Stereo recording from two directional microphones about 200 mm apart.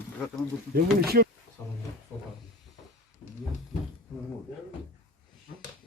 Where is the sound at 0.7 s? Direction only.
50° right (ahead or behind).